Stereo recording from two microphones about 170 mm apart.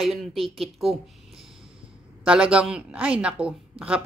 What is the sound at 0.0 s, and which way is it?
A woman's voice, centre (ahead or behind).